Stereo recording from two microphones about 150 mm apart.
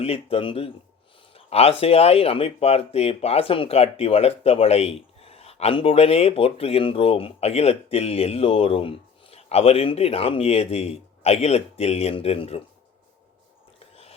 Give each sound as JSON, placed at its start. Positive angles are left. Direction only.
{"t": 0.0, "sound": "speech", "side_deg": 40}